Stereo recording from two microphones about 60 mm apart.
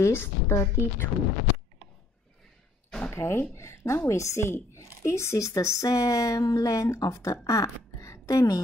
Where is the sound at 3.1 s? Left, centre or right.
Left.